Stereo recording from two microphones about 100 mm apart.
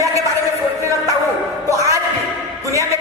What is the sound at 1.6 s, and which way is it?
Music, 30° right (ahead or behind).